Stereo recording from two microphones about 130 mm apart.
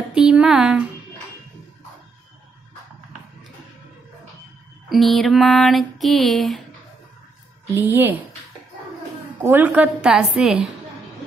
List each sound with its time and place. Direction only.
0.1 s a sound: 5° right (ahead or behind)
4.8 s music: centre (ahead or behind)
7.7 s a woman's voice: 15° right (ahead or behind)
9.4 s a woman's voice: 15° right (ahead or behind)